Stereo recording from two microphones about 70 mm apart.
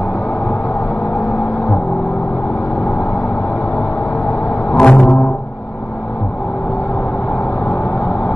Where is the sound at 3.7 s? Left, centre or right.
Left.